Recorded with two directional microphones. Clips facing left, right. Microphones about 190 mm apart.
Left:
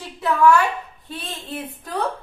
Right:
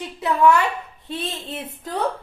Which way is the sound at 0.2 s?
20° right (ahead or behind).